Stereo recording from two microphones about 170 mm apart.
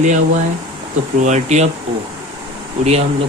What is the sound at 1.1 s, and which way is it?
Speech, 45° right (ahead or behind).